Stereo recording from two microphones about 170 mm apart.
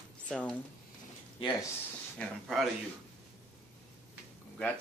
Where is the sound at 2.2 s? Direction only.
5° left (ahead or behind).